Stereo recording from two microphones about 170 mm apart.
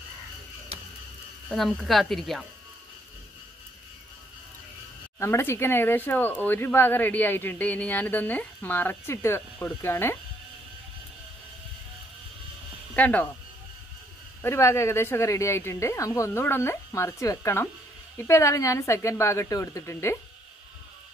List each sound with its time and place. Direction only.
1.5 s speech: centre (ahead or behind)
5.2 s speech: 15° left (ahead or behind)
12.9 s speech: 10° left (ahead or behind)
14.4 s speech: 15° left (ahead or behind)